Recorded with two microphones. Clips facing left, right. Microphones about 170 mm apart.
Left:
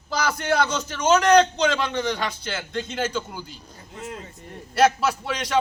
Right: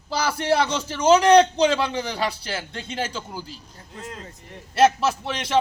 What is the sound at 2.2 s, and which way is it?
Speech, 35° right (ahead or behind).